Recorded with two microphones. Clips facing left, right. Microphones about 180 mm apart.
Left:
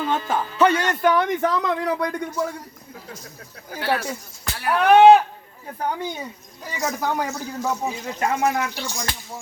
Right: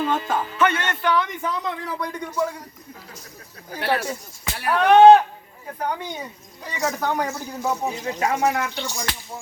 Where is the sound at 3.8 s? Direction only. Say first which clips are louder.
Even; 25° right (ahead or behind).